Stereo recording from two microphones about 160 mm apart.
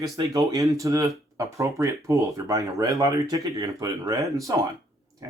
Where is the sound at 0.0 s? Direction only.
20° right (ahead or behind).